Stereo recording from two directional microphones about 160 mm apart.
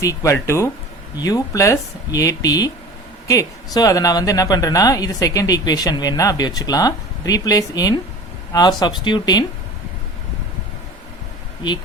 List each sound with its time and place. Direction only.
0.0 s speech: 20° left (ahead or behind)